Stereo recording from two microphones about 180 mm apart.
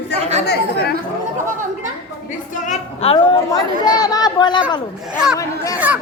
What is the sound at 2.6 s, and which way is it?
Speech, 40° left (ahead or behind).